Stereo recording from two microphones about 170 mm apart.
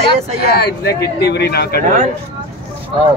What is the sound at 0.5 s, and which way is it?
Speech, 70° left (ahead or behind).